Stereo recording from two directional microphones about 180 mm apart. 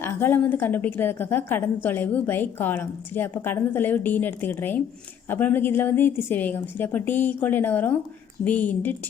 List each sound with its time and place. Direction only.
0.0 s a woman's voice: 10° left (ahead or behind)